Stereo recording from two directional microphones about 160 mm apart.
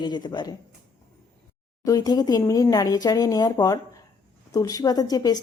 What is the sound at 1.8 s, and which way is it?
Speech, 20° left (ahead or behind).